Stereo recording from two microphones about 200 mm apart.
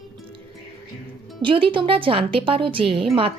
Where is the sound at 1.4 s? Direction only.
25° right (ahead or behind).